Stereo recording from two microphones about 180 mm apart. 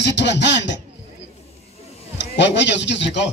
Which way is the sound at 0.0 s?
75° left (ahead or behind).